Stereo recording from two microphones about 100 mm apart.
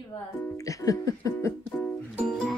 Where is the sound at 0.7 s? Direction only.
35° left (ahead or behind).